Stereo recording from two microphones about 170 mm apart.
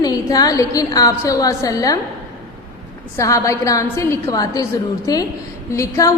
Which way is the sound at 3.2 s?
20° left (ahead or behind).